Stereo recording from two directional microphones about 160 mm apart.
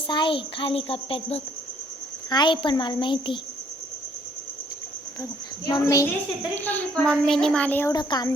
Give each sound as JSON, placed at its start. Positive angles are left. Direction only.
{"t": 0.1, "sound": "a child's voice", "side_deg": 30}
{"t": 5.6, "sound": "a woman's voice", "side_deg": 25}
{"t": 6.6, "sound": "a woman's voice", "side_deg": 10}
{"t": 7.9, "sound": "a woman's voice", "side_deg": 25}